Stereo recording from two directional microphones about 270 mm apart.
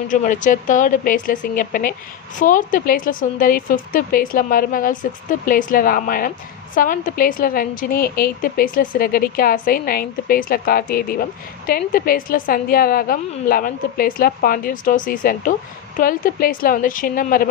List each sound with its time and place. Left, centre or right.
0.1 s a woman's voice: left